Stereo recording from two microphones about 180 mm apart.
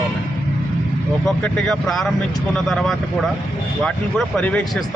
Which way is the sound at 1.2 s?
5° left (ahead or behind).